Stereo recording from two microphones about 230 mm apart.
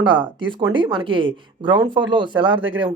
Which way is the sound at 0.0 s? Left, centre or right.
Right.